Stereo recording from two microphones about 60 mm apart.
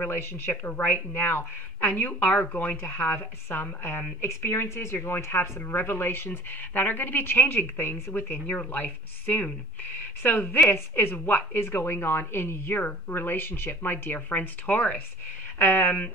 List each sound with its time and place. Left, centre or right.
0.0 s speech: left
0.5 s a woman's voice: left
0.9 s speech: left
4.2 s a woman's voice: left